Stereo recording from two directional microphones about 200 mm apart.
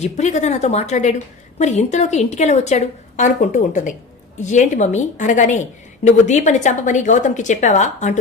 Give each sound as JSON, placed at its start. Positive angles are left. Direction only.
{"t": 0.0, "sound": "a woman's voice", "side_deg": 35}